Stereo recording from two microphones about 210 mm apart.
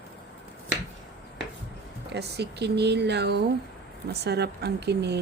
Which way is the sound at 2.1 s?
50° right (ahead or behind).